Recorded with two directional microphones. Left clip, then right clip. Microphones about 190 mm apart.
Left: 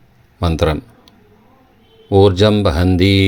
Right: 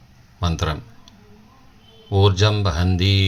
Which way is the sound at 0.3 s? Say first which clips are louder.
Left 9 dB; 45° left (ahead or behind).